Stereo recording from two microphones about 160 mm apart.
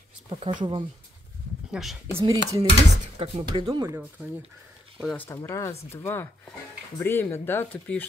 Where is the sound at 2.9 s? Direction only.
40° right (ahead or behind).